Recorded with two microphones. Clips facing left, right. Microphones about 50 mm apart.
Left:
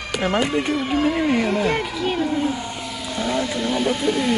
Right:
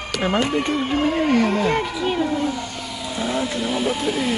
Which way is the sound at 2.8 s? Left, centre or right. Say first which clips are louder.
Left 1 dB; centre.